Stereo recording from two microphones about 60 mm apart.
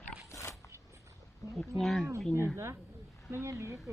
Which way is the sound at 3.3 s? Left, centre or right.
Right.